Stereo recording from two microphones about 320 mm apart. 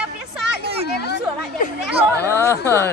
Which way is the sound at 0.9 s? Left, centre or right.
Left.